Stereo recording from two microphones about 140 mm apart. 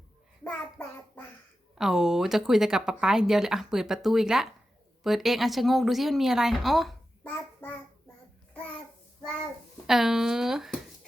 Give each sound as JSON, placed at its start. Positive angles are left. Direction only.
{"t": 0.4, "sound": "a child's voice", "side_deg": 10}
{"t": 1.8, "sound": "speech", "side_deg": -5}
{"t": 7.6, "sound": "child singing", "side_deg": 15}
{"t": 9.8, "sound": "speech", "side_deg": -5}